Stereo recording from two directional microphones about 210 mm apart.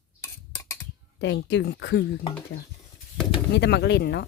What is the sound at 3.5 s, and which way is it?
Speech, 55° left (ahead or behind).